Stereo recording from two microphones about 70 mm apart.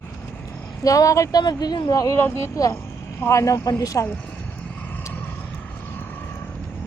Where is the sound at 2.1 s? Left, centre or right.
Left.